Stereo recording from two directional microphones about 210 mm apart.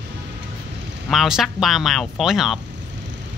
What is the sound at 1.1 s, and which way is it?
Speech, centre (ahead or behind).